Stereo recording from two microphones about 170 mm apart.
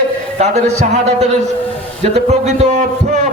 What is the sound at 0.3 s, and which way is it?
Speech, 40° right (ahead or behind).